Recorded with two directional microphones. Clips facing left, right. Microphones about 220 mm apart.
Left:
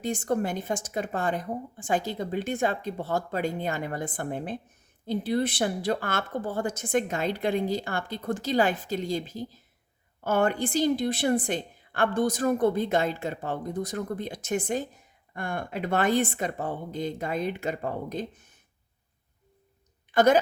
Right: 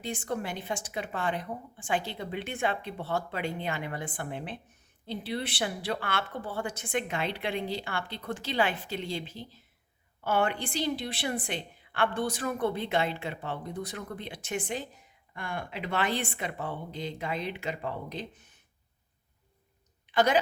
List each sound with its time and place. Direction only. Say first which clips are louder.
0.0 s speech: left 6 dB; 45° left (ahead or behind)
20.1 s a woman's voice: left 5 dB; 45° left (ahead or behind)